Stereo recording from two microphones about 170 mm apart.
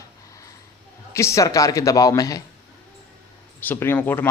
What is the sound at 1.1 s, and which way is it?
A man's voice, 15° left (ahead or behind).